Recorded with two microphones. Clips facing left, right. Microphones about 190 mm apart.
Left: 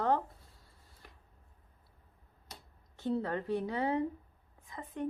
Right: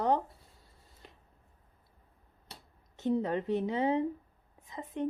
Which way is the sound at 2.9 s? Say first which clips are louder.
Right 4 dB; 20° right (ahead or behind).